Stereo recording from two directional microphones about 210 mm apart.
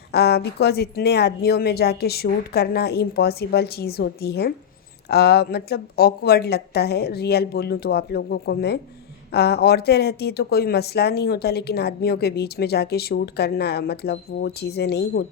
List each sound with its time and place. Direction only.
0.1 s speech: 50° left (ahead or behind)